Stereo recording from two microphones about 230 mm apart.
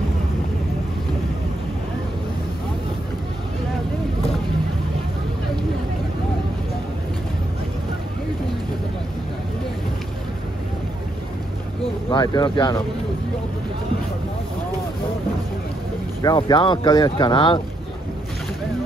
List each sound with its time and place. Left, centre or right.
11.8 s speech: centre
16.2 s speech: centre